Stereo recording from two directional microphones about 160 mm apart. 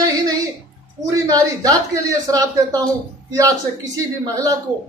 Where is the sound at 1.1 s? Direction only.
20° right (ahead or behind).